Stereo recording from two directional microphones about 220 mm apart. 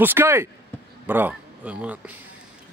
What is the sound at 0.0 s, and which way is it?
Speech, 10° right (ahead or behind).